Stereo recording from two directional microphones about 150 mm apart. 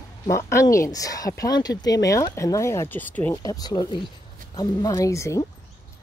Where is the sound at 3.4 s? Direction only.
25° left (ahead or behind).